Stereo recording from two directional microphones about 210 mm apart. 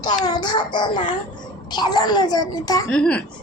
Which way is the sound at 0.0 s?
20° left (ahead or behind).